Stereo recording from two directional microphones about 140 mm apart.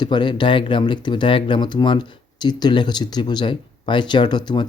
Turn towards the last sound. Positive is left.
turn(degrees=30)  # may be behind; listen again after turning